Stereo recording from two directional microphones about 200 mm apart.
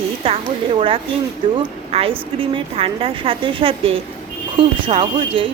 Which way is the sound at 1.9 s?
30° right (ahead or behind).